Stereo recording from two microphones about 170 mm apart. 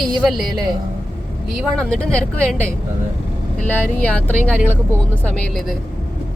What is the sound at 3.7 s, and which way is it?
Speech, 10° left (ahead or behind).